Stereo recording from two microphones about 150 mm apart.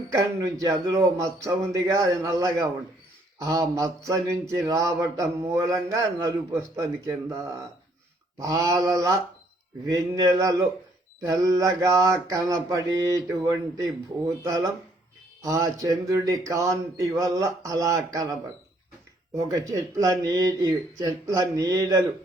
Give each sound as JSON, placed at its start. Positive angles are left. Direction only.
{"t": 0.1, "sound": "speech", "side_deg": -20}
{"t": 15.4, "sound": "speech", "side_deg": -20}
{"t": 19.5, "sound": "speech", "side_deg": -25}